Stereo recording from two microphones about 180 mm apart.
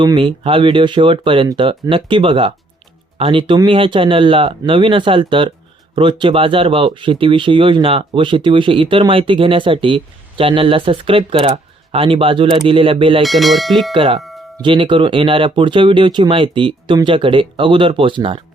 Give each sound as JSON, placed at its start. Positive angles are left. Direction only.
{"t": 0.0, "sound": "speech", "side_deg": -25}
{"t": 13.2, "sound": "speech", "side_deg": 0}
{"t": 13.9, "sound": "speech", "side_deg": -30}
{"t": 14.2, "sound": "doorbell", "side_deg": 0}
{"t": 14.6, "sound": "speech", "side_deg": -25}